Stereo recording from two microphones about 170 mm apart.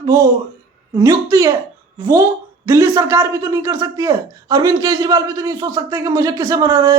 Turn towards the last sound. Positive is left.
turn(degrees=-20)  # may be behind; listen again after turning